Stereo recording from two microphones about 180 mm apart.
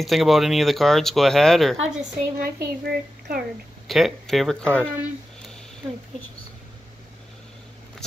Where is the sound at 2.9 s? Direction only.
60° right (ahead or behind).